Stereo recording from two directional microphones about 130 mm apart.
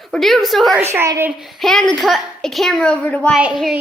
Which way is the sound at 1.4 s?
Centre (ahead or behind).